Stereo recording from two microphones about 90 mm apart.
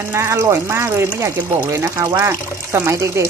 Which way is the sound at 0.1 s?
30° right (ahead or behind).